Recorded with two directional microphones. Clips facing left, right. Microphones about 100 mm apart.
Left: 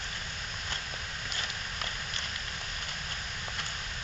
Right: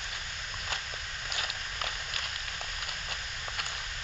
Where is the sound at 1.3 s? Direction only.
5° right (ahead or behind).